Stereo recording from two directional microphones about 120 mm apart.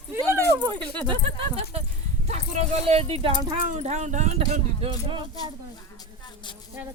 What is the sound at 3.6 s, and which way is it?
Speech, 80° right.